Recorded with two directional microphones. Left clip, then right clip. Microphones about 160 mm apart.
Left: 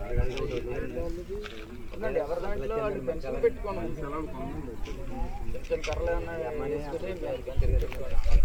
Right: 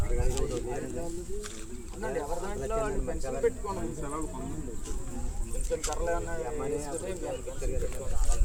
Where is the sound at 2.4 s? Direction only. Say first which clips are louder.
Left 1 dB; 25° right (ahead or behind).